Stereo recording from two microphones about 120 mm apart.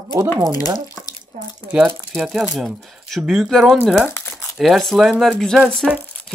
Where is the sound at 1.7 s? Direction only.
10° right (ahead or behind).